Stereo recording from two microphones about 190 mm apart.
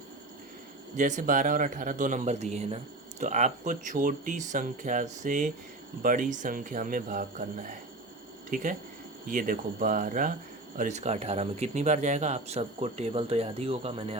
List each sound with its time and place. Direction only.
0.9 s speech: 40° right (ahead or behind)